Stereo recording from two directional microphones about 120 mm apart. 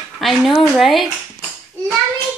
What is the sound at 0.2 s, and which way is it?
Speech, centre (ahead or behind).